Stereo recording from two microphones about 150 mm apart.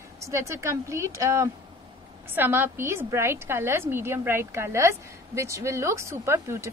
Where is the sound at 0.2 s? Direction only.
20° right (ahead or behind).